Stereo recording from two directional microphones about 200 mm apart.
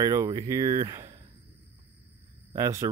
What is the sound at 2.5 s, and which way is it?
Speech, 15° right (ahead or behind).